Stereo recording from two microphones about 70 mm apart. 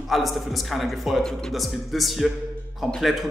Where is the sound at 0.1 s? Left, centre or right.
Centre.